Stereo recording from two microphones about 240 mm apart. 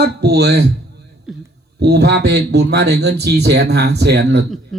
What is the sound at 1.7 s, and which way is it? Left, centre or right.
Speech, right.